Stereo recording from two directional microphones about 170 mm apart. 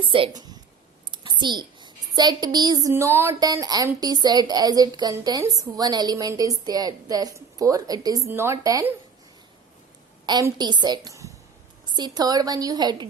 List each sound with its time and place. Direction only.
0.0 s a woman's voice: 30° right (ahead or behind)
10.2 s a woman's voice: 25° right (ahead or behind)